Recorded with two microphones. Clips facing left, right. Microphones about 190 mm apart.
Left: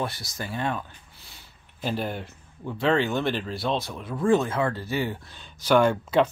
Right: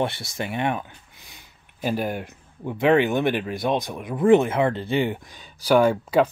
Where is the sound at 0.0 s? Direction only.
25° right (ahead or behind).